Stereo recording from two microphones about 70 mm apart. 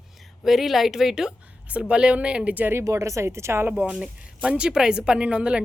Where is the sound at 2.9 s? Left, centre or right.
Right.